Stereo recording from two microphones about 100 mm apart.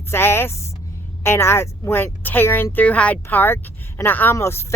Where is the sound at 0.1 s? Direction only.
25° left (ahead or behind).